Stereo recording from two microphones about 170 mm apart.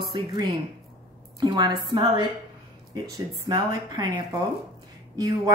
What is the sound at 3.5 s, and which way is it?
A woman's voice, 25° right (ahead or behind).